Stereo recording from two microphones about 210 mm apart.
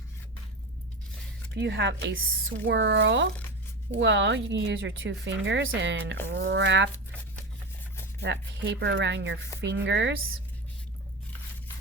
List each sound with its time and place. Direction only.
1.5 s speech: 55° right (ahead or behind)
8.2 s speech: 55° right (ahead or behind)